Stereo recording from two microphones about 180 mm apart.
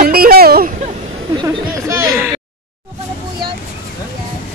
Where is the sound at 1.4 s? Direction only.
15° right (ahead or behind).